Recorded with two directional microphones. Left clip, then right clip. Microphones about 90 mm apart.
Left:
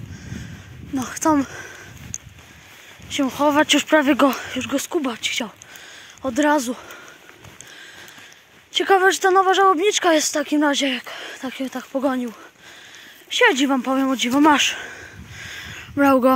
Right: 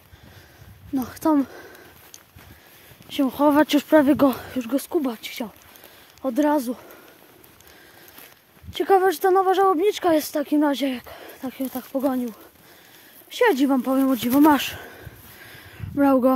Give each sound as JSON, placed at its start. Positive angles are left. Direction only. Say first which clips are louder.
{"t": 0.9, "sound": "a sound", "louder": "left 2 dB", "side_deg": -30}
{"t": 3.3, "sound": "speech", "louder": "left 2 dB", "side_deg": -65}
{"t": 3.9, "sound": "speech", "louder": "right 1 dB", "side_deg": -35}
{"t": 4.4, "sound": "speech", "louder": "left 3 dB", "side_deg": -50}
{"t": 4.9, "sound": "speech", "louder": "left 3 dB", "side_deg": -20}
{"t": 8.7, "sound": "speech", "louder": "left 3 dB", "side_deg": -20}
{"t": 13.3, "sound": "speech", "louder": "left 3 dB", "side_deg": -20}
{"t": 14.1, "sound": "speech", "louder": "left 2 dB", "side_deg": -55}
{"t": 14.9, "sound": "a sound", "louder": "left 6 dB", "side_deg": -35}
{"t": 15.6, "sound": "a sound", "louder": "left 3 dB", "side_deg": -15}